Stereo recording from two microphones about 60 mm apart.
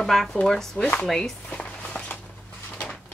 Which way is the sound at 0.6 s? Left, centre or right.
Centre.